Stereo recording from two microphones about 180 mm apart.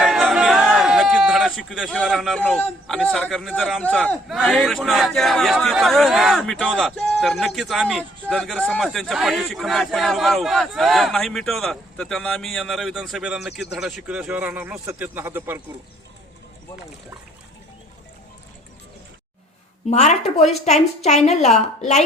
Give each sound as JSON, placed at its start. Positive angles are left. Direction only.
{"t": 0.0, "sound": "a sound", "side_deg": -5}
{"t": 2.0, "sound": "a man's voice", "side_deg": 0}
{"t": 19.9, "sound": "a woman's voice", "side_deg": 40}